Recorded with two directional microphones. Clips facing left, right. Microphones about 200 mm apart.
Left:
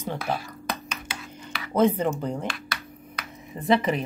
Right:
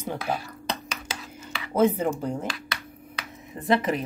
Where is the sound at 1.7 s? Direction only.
5° right (ahead or behind).